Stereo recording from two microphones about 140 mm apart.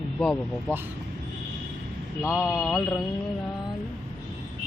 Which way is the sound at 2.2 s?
20° left (ahead or behind).